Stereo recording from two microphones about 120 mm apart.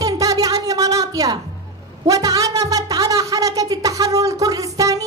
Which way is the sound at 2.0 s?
30° right (ahead or behind).